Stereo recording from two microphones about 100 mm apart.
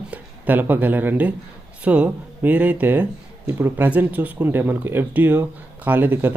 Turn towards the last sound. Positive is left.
turn(degrees=-20)  # may be behind; listen again after turning